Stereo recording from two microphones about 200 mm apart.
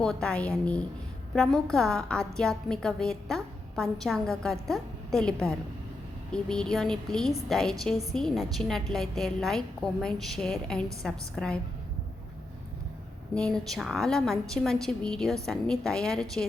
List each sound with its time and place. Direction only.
0.0 s a woman's voice: 5° left (ahead or behind)
13.3 s a woman's voice: 5° left (ahead or behind)